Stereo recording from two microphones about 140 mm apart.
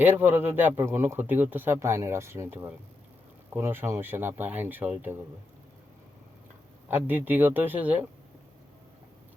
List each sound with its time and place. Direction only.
0.0 s a man's voice: 15° right (ahead or behind)
6.8 s a man's voice: 15° right (ahead or behind)